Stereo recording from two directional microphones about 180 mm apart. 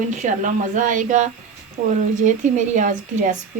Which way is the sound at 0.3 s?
45° right (ahead or behind).